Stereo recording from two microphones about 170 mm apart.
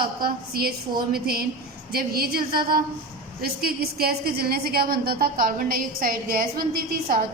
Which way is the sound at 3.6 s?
65° right (ahead or behind).